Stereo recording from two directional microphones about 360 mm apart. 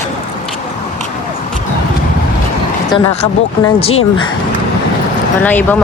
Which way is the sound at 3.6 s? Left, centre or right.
Centre.